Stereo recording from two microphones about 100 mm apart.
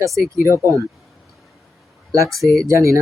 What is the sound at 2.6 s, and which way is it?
Speech, 30° right (ahead or behind).